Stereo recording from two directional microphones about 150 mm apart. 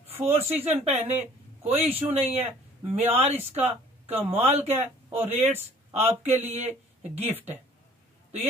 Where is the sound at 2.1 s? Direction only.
45° right (ahead or behind).